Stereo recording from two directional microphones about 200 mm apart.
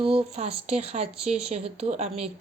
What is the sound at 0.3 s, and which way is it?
A woman's voice, 30° right (ahead or behind).